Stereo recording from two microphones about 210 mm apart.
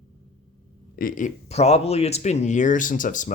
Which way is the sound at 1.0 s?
40° left (ahead or behind).